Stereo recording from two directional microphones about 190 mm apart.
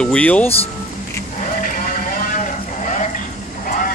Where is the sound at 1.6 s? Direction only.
45° left (ahead or behind).